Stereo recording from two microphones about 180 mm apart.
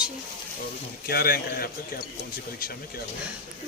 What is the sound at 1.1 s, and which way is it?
Speech, 55° left (ahead or behind).